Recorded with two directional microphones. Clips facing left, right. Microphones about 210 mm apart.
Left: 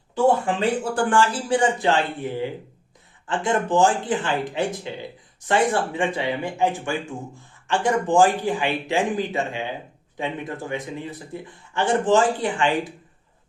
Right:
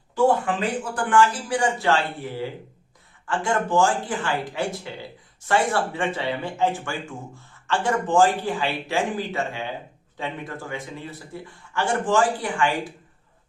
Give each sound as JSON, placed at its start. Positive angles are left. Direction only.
{"t": 0.9, "sound": "speech", "side_deg": 30}